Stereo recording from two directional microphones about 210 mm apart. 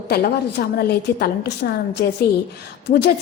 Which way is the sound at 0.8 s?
50° left (ahead or behind).